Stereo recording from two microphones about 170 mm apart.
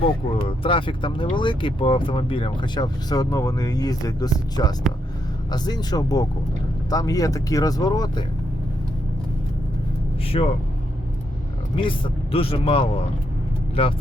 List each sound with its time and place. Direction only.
0.0 s speech: 30° left (ahead or behind)
10.2 s speech: 35° left (ahead or behind)
11.8 s speech: 30° left (ahead or behind)